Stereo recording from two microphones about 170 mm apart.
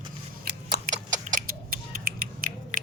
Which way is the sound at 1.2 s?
55° right (ahead or behind).